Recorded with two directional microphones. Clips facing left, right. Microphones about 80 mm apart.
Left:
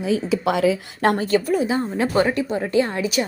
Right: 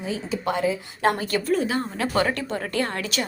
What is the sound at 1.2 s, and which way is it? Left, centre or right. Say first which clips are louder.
Speech: left 6 dB; left.